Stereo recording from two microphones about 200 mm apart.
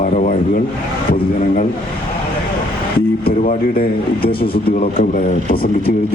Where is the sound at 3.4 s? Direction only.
45° left (ahead or behind).